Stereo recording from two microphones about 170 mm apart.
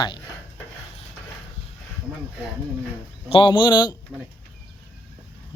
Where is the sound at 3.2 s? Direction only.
30° left (ahead or behind).